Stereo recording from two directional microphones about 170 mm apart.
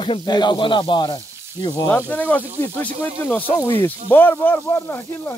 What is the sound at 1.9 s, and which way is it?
Speech, 10° left (ahead or behind).